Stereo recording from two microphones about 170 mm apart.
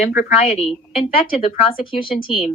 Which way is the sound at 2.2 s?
30° left (ahead or behind).